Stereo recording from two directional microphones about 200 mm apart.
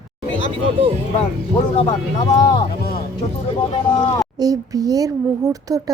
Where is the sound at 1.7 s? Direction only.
25° left (ahead or behind).